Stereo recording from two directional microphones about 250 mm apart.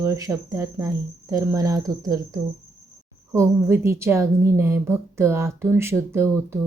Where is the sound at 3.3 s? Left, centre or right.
Centre.